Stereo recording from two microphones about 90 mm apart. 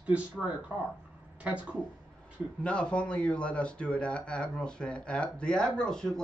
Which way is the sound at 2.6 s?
10° left (ahead or behind).